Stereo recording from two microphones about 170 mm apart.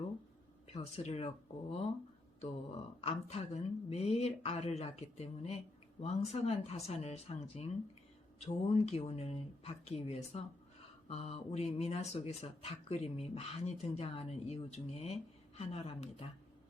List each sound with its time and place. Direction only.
0.7 s speech: 40° left (ahead or behind)
2.4 s speech: 35° left (ahead or behind)